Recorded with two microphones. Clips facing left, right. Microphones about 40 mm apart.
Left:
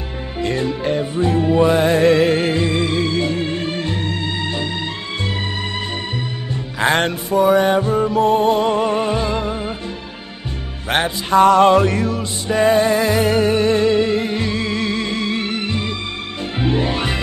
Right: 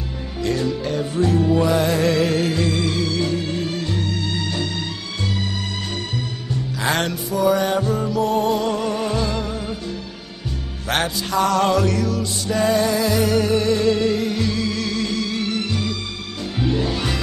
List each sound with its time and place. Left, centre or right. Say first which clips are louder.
0.4 s music: left 2 dB; left